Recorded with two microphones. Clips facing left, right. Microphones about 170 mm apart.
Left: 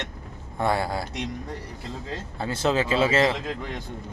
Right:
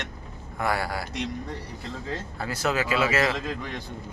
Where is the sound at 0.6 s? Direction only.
25° left (ahead or behind).